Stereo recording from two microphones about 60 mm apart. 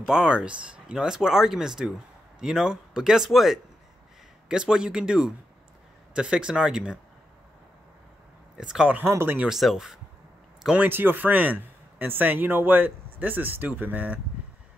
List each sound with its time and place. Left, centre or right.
0.0 s speech: centre
8.5 s speech: centre
9.0 s speech: right
9.5 s speech: centre
10.8 s speech: right